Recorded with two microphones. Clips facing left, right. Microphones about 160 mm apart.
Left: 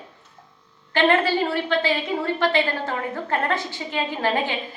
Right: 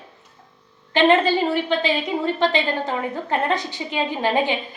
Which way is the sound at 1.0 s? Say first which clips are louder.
Right 3 dB; 20° right (ahead or behind).